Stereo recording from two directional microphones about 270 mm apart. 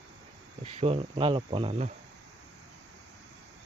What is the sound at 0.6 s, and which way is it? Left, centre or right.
Speech, right.